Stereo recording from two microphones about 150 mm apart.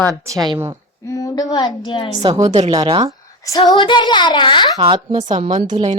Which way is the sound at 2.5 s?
45° right (ahead or behind).